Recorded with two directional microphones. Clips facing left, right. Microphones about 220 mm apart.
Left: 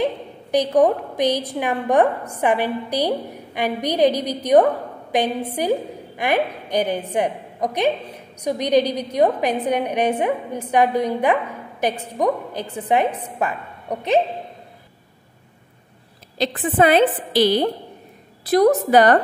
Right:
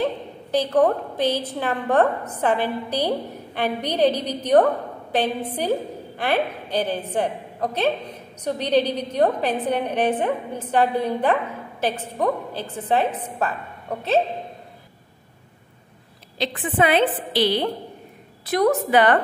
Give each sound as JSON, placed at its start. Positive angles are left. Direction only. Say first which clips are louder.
{"t": 0.0, "sound": "a woman's voice", "louder": "left 2 dB", "side_deg": 15}
{"t": 16.3, "sound": "a woman's voice", "louder": "left 4 dB", "side_deg": 40}